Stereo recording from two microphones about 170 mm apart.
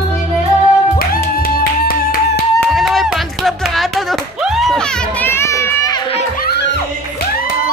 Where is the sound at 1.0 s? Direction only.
60° left (ahead or behind).